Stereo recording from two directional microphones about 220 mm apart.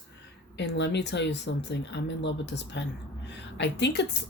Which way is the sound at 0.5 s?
50° left (ahead or behind).